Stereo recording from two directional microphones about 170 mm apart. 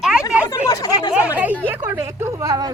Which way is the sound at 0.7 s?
20° left (ahead or behind).